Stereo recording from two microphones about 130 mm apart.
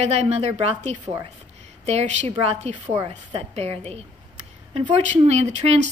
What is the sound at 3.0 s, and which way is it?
Speech, 35° right (ahead or behind).